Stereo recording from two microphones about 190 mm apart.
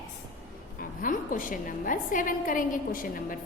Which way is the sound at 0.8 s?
45° left (ahead or behind).